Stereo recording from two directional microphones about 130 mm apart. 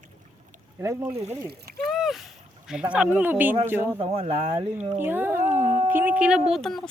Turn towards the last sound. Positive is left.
turn(degrees=0)  # may be behind; listen again after turning